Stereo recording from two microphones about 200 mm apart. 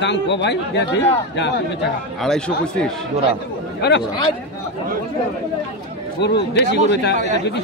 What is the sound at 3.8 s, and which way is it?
Speech, 60° left (ahead or behind).